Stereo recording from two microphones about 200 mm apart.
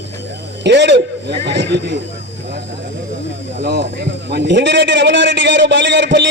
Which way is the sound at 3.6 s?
55° right (ahead or behind).